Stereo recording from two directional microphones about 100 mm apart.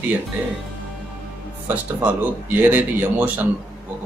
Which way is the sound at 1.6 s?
20° right (ahead or behind).